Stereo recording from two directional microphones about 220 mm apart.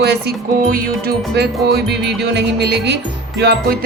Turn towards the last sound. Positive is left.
turn(degrees=-50)  # may be behind; listen again after turning